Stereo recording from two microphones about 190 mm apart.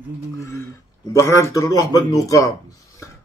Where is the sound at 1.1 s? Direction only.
15° left (ahead or behind).